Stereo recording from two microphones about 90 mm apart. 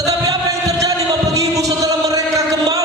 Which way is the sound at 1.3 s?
40° right (ahead or behind).